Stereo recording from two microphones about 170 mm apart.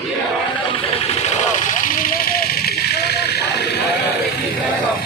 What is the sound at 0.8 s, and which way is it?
Vehicle, 45° left (ahead or behind).